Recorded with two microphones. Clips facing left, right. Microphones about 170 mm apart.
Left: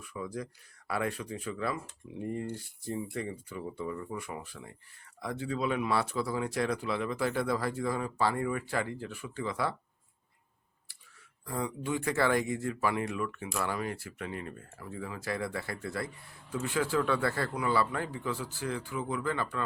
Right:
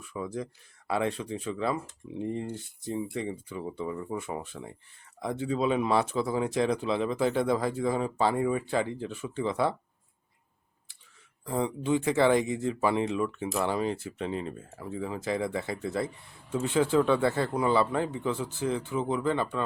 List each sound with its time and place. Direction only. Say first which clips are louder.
0.0 s speech: right 3 dB; 25° right (ahead or behind)
11.4 s speech: right 6 dB; 20° right (ahead or behind)